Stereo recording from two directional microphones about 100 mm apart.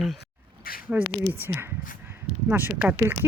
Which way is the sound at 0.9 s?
20° right (ahead or behind).